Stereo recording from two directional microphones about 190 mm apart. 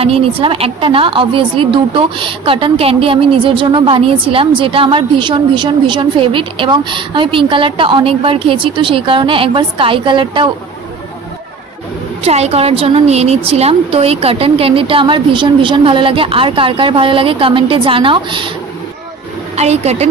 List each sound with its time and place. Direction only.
0.0 s a woman's voice: 30° right (ahead or behind)
12.2 s a woman's voice: 35° right (ahead or behind)
19.5 s speech: 35° right (ahead or behind)